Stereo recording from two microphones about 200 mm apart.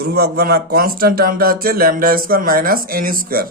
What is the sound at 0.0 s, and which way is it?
Speech, 50° right (ahead or behind).